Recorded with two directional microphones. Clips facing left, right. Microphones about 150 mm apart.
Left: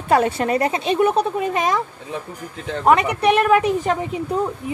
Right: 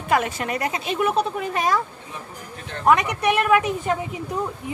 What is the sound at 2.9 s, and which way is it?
Speech, 30° left (ahead or behind).